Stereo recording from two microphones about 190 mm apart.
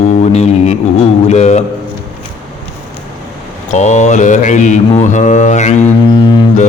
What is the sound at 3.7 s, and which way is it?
Mantra, 40° left (ahead or behind).